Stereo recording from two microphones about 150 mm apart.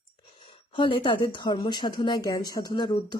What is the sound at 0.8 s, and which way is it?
Speech, 35° left (ahead or behind).